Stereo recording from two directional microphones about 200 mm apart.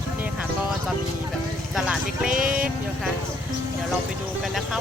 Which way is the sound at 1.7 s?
5° right (ahead or behind).